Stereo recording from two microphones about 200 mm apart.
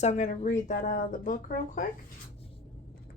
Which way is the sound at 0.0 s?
35° left (ahead or behind).